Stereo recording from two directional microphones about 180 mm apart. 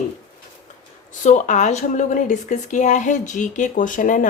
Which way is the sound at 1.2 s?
40° left (ahead or behind).